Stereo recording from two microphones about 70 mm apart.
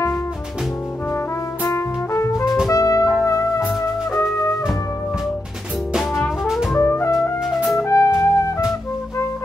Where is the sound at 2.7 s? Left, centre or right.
Left.